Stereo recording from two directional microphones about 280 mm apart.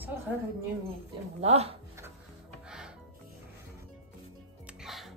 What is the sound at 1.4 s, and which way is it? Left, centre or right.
Speech, right.